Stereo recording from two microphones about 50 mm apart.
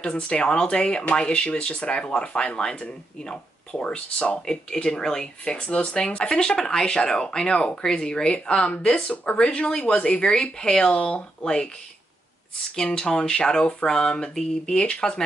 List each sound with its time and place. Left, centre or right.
0.0 s speech: left
9.1 s speech: left
9.4 s speech: left
12.7 s speech: centre